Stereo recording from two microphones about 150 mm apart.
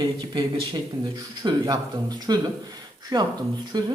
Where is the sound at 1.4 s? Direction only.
25° right (ahead or behind).